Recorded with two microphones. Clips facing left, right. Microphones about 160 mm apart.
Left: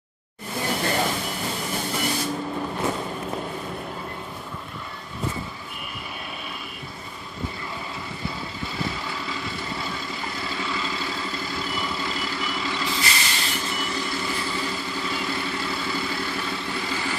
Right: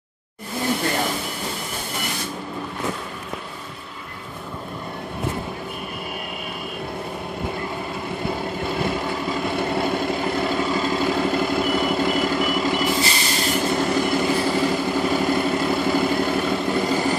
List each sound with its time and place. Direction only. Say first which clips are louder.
8.3 s vehicle: right 9 dB; 55° right (ahead or behind)